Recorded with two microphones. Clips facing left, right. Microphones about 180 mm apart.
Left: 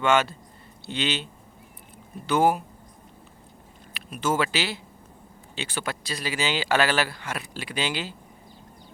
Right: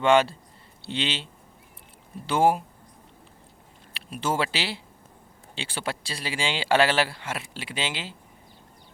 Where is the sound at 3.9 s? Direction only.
30° right (ahead or behind).